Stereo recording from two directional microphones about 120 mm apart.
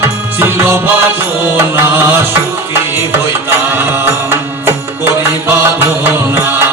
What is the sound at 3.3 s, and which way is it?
Music, 20° right (ahead or behind).